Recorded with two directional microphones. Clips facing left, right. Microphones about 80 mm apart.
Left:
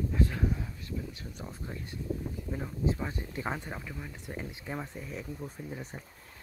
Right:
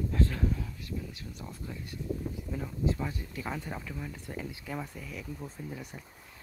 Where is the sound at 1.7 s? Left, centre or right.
Left.